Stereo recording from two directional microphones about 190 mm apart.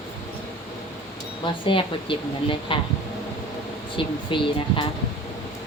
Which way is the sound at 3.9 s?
25° left (ahead or behind).